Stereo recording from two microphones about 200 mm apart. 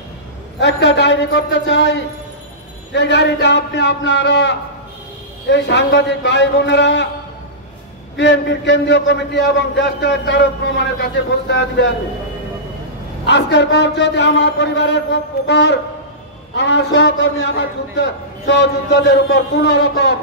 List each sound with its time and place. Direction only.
0.6 s a man's voice: 60° left (ahead or behind)
8.2 s a man's voice: 60° left (ahead or behind)
13.3 s a man's voice: 60° left (ahead or behind)